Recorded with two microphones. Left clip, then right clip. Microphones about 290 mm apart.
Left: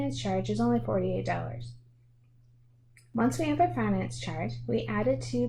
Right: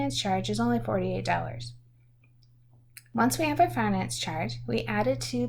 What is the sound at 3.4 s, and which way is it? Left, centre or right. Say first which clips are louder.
Speech: right 2 dB; right.